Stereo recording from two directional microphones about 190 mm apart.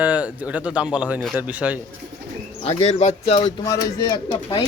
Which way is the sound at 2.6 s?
35° left (ahead or behind).